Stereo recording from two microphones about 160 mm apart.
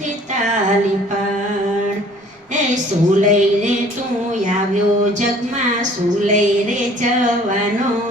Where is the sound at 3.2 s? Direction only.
50° right (ahead or behind).